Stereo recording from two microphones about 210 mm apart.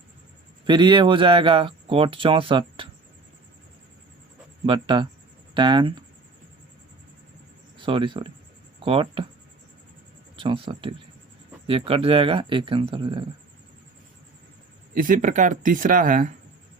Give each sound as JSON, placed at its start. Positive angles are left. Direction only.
{"t": 0.7, "sound": "speech", "side_deg": -20}
{"t": 4.6, "sound": "speech", "side_deg": -20}
{"t": 7.8, "sound": "speech", "side_deg": -25}
{"t": 10.3, "sound": "speech", "side_deg": -25}
{"t": 14.9, "sound": "speech", "side_deg": -40}